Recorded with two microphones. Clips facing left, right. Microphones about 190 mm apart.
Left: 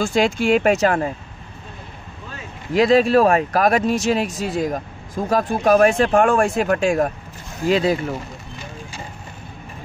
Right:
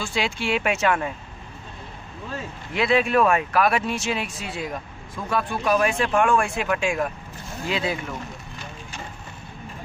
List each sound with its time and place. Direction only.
0.0 s speech: 45° left (ahead or behind)
2.7 s speech: 40° left (ahead or behind)